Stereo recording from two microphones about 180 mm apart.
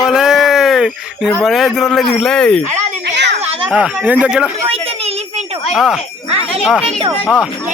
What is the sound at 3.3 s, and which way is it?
Children playing, 30° right (ahead or behind).